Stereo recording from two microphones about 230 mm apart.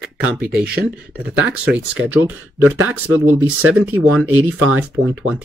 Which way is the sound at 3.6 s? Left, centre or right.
Right.